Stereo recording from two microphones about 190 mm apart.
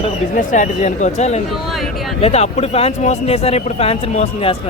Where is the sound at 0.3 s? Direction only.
40° left (ahead or behind).